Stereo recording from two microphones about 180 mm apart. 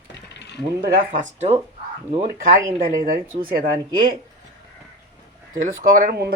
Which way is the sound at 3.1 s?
55° right (ahead or behind).